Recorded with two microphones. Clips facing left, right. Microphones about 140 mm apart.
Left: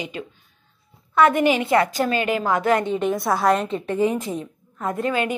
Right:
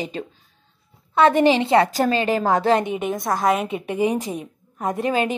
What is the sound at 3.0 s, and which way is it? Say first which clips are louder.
A woman's voice: left 1 dB; centre (ahead or behind).